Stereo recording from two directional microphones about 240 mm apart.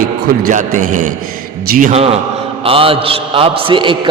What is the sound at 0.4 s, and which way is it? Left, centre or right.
A man's voice, right.